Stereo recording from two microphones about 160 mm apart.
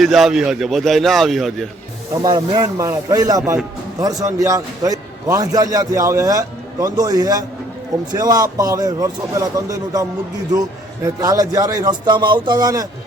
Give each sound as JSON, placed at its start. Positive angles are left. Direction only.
{"t": 0.0, "sound": "a man's voice", "side_deg": 0}
{"t": 2.2, "sound": "a man's voice", "side_deg": -25}